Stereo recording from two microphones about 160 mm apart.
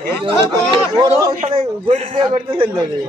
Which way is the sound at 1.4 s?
35° right (ahead or behind).